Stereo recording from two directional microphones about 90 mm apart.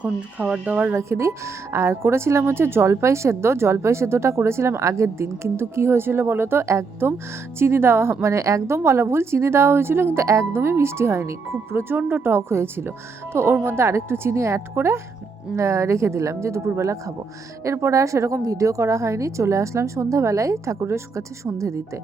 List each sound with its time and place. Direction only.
0.0 s speech: 10° right (ahead or behind)
0.9 s a woman's voice: 30° right (ahead or behind)